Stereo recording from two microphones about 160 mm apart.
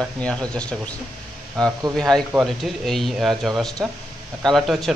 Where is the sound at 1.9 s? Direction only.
5° left (ahead or behind).